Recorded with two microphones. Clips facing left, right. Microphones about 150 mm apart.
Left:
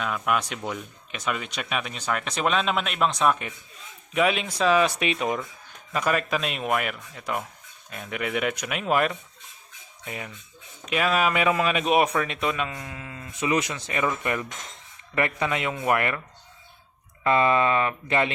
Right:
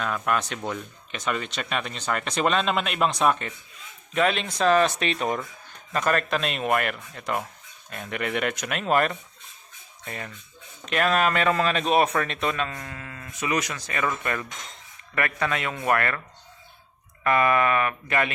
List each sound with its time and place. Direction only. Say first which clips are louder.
0.0 s speech: even; 5° left (ahead or behind)
4.1 s speech: even; 10° left (ahead or behind)
17.2 s speech: even; 25° left (ahead or behind)